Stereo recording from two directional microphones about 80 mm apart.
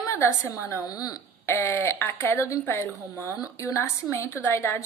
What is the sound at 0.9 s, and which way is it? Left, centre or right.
Speech, left.